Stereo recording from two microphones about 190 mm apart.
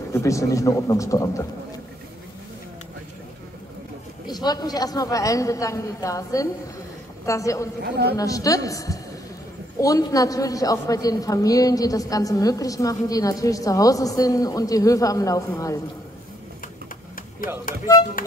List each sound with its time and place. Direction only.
0.1 s a woman's voice: 15° left (ahead or behind)
4.3 s a woman's voice: 20° left (ahead or behind)
7.8 s a man's voice: 55° right (ahead or behind)
8.2 s a woman's voice: 15° left (ahead or behind)
17.7 s speech: 45° left (ahead or behind)